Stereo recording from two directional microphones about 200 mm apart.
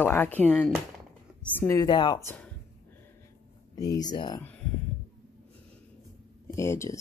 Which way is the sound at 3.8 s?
20° left (ahead or behind).